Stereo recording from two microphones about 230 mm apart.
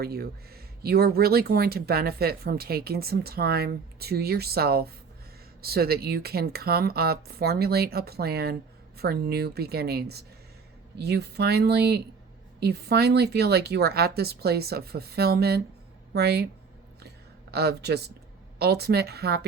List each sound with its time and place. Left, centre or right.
0.0 s speech: right
17.5 s speech: right